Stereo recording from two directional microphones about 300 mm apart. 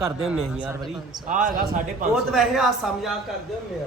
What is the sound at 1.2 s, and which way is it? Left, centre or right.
Speech, right.